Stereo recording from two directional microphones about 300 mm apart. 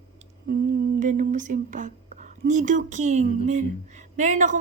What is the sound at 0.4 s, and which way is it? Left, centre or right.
A woman's voice, right.